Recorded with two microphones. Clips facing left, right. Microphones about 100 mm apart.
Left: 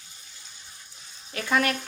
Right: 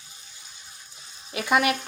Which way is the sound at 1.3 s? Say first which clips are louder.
Right 3 dB; 15° right (ahead or behind).